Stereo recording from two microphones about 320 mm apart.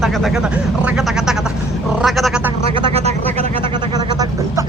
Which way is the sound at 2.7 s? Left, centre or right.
Centre.